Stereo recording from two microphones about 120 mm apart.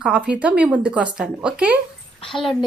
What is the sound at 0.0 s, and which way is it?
Speech, 10° right (ahead or behind).